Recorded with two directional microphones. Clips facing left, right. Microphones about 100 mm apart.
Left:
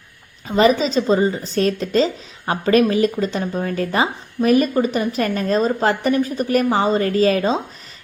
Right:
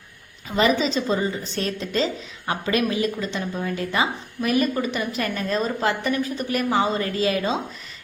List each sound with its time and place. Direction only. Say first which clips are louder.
0.4 s a woman's voice: left 5 dB; 35° left (ahead or behind)